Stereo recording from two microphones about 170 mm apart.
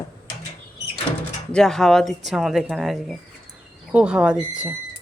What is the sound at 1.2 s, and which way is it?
Speech, 5° left (ahead or behind).